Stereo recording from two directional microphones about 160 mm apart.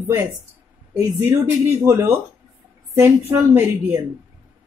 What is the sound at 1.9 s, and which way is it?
A woman's voice, 20° right (ahead or behind).